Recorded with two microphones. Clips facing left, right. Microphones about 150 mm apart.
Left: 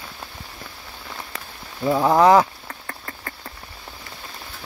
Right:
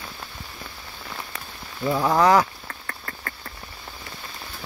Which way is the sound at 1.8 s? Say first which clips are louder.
Left 4 dB; 20° left (ahead or behind).